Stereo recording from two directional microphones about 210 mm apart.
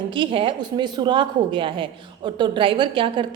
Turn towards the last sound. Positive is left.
turn(degrees=-25)  # may be behind; listen again after turning